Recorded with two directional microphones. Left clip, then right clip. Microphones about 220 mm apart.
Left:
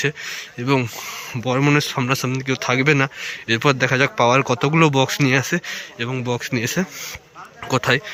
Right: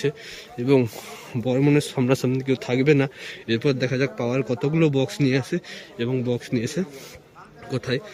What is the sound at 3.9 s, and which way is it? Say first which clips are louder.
Speech: left 9 dB; 45° left (ahead or behind).